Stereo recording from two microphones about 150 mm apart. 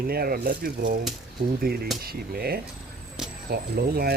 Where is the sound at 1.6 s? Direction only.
90° right.